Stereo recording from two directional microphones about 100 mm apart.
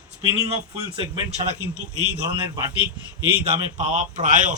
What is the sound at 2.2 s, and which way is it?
Speech, 40° right (ahead or behind).